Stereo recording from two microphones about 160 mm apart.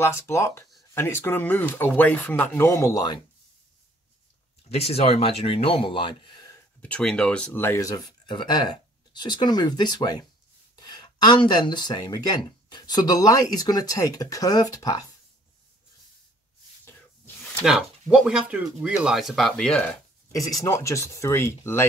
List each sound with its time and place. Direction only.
0.0 s speech: 15° left (ahead or behind)
4.7 s speech: 40° left (ahead or behind)
6.8 s speech: 5° left (ahead or behind); by 15.0 s 25° left (ahead or behind)
17.6 s speech: centre (ahead or behind)
20.6 s speech: 20° left (ahead or behind)